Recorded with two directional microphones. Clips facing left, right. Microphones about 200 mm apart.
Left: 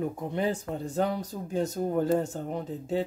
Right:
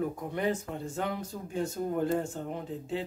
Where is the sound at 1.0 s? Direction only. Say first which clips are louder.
Left 7 dB; 40° left (ahead or behind).